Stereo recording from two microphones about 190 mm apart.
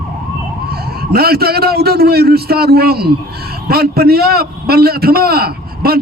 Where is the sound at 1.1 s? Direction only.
55° right (ahead or behind).